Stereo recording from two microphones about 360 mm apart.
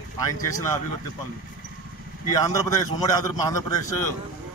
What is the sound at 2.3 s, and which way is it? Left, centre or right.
A man's voice, centre.